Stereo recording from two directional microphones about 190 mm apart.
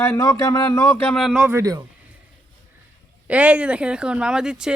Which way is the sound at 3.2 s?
5° right (ahead or behind).